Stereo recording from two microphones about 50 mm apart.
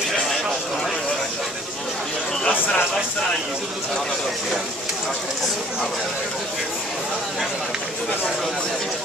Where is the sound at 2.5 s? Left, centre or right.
Left.